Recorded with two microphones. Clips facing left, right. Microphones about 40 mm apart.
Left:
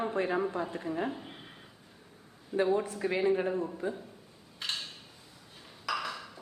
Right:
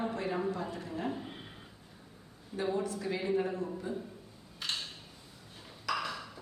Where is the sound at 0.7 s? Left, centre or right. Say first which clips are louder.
Left 5 dB; left.